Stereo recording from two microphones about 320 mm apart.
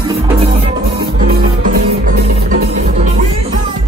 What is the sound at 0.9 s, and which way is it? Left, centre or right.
Music, right.